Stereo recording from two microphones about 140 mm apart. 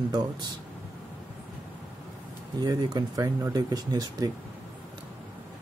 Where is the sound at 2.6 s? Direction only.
30° right (ahead or behind).